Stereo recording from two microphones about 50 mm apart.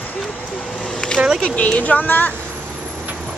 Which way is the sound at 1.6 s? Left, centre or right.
Left.